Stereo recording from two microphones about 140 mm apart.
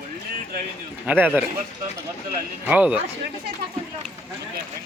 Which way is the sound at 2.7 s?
10° right (ahead or behind).